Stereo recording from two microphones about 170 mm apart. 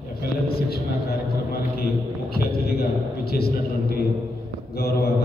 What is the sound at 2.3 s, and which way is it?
Music, 65° left (ahead or behind).